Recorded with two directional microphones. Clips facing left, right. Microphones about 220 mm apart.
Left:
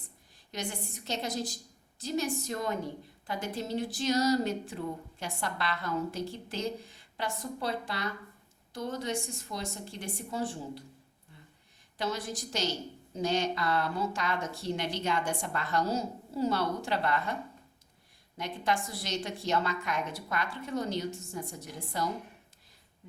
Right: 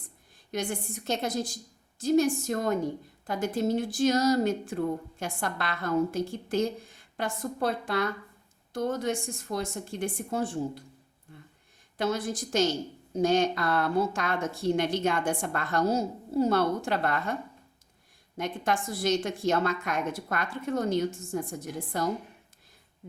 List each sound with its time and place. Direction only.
0.5 s speech: 50° right (ahead or behind)
11.9 s speech: 50° right (ahead or behind)
18.3 s speech: 50° right (ahead or behind)